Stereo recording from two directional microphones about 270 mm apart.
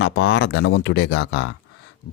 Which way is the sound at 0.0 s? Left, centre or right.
Left.